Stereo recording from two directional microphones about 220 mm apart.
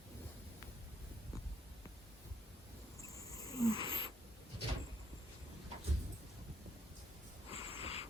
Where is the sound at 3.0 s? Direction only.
15° left (ahead or behind).